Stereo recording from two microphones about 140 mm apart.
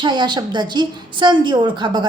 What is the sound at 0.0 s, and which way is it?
A woman's voice, 30° right (ahead or behind).